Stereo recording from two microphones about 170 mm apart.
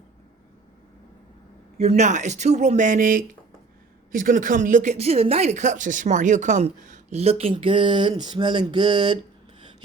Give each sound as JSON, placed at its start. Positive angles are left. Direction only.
{"t": 1.8, "sound": "speech", "side_deg": -40}